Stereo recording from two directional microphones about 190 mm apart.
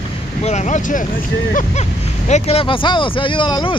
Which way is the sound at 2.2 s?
35° left (ahead or behind).